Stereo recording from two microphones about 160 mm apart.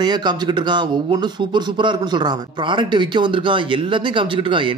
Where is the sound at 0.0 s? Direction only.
25° right (ahead or behind).